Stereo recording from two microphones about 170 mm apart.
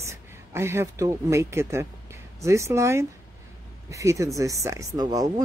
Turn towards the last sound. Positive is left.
turn(degrees=-20)  # may be behind; listen again after turning